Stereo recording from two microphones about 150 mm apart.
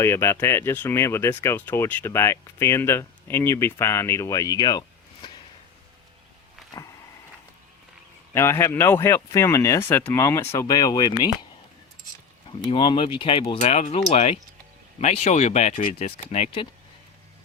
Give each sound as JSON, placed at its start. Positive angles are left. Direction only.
{"t": 0.0, "sound": "speech", "side_deg": 20}
{"t": 6.7, "sound": "a sound", "side_deg": 25}
{"t": 8.3, "sound": "speech", "side_deg": 15}
{"t": 12.5, "sound": "speech", "side_deg": 35}